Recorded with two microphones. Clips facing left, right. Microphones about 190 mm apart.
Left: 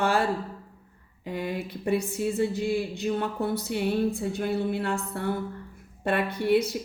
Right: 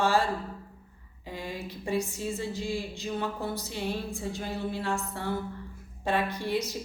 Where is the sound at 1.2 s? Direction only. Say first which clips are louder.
Left 6 dB; 60° left (ahead or behind).